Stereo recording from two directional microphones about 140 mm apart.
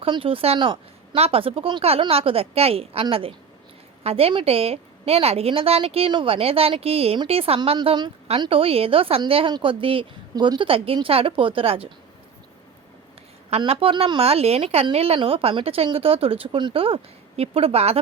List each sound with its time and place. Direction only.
0.0 s a woman's voice: 40° right (ahead or behind)
13.6 s a woman's voice: 40° right (ahead or behind)